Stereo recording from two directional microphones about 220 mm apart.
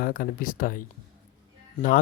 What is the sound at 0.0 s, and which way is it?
Speech, 40° left (ahead or behind).